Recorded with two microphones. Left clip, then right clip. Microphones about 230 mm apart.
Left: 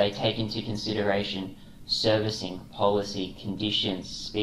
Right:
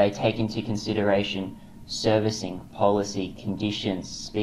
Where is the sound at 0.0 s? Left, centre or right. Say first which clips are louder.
Right 3 dB; right.